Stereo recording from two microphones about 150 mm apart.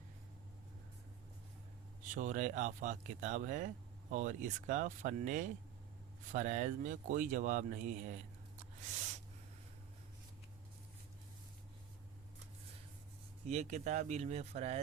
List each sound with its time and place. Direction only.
2.1 s speech: 60° right (ahead or behind)
13.5 s speech: 50° right (ahead or behind)